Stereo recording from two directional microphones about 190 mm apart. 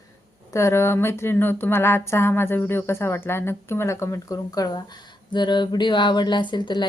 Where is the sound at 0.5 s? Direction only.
15° left (ahead or behind).